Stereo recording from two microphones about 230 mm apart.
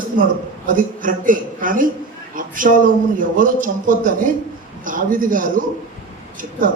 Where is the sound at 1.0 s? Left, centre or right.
Right.